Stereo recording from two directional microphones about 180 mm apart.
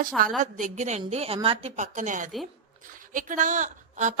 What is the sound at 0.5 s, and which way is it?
A woman's voice, 40° right (ahead or behind).